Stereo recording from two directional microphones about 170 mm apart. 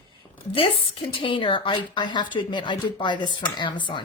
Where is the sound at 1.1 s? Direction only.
30° left (ahead or behind).